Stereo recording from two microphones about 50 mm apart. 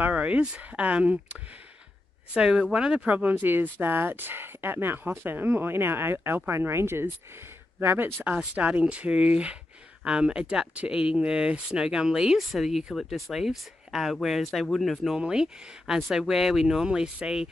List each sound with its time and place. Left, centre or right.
0.0 s speech: right
2.3 s speech: centre
3.1 s speech: right
7.8 s speech: right
8.5 s speech: right
12.4 s speech: centre
15.1 s speech: centre